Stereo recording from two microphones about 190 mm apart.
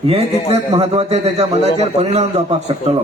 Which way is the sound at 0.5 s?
30° right (ahead or behind).